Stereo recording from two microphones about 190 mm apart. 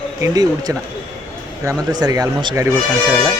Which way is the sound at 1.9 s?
20° right (ahead or behind).